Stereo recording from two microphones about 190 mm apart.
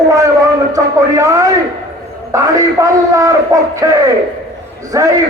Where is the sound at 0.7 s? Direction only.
15° right (ahead or behind).